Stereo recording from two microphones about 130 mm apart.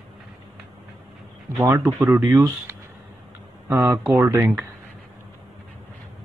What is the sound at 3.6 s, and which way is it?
Speech, 20° right (ahead or behind).